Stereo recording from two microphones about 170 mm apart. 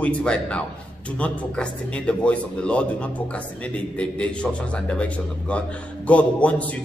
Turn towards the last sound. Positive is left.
turn(degrees=10)  # may be behind; listen again after turning